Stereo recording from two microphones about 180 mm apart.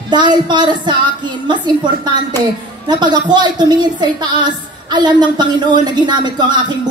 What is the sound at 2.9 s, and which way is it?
A woman's voice, 25° right (ahead or behind).